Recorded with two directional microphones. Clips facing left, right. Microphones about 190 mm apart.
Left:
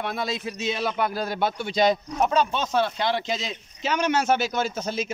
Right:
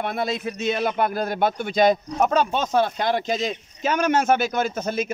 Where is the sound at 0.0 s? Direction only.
55° right (ahead or behind).